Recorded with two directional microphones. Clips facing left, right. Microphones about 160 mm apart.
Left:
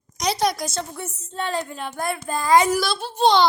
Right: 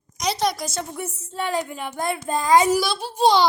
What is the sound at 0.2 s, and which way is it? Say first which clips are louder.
A woman's voice: left 1 dB; centre (ahead or behind).